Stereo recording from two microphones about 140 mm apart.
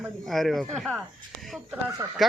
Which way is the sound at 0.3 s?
Centre (ahead or behind).